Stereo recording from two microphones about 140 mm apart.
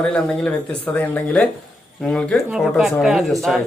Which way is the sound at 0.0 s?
5° left (ahead or behind).